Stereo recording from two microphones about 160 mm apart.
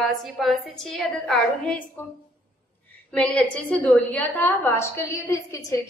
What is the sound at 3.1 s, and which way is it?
A woman's voice, 10° left (ahead or behind).